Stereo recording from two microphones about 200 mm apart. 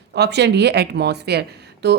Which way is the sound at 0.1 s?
55° right (ahead or behind).